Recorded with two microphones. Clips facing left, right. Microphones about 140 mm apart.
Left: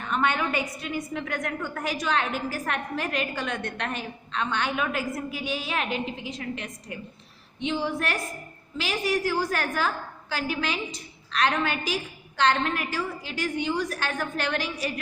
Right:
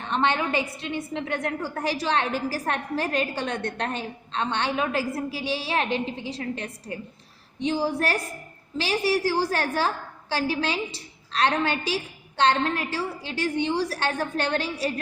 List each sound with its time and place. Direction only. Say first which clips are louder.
0.0 s a woman's voice: right 1 dB; 30° right (ahead or behind)